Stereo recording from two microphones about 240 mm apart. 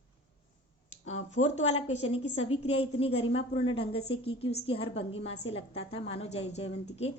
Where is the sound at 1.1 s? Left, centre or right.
Left.